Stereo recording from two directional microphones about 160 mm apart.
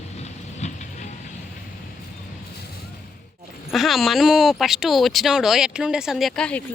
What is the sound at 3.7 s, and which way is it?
Speech, centre (ahead or behind).